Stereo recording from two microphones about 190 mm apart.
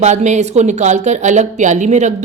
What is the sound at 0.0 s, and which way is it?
A woman's voice, 40° right (ahead or behind).